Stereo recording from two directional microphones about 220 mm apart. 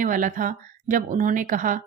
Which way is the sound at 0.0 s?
35° right (ahead or behind).